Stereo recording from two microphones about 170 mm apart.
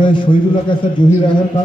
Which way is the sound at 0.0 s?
30° left (ahead or behind).